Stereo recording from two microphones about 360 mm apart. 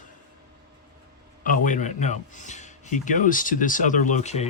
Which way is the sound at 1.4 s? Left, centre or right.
Left.